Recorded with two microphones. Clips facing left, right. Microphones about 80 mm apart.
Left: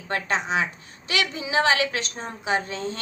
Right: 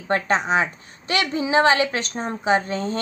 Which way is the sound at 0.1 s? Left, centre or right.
Right.